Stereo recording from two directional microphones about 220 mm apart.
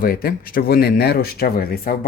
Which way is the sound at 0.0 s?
45° left (ahead or behind).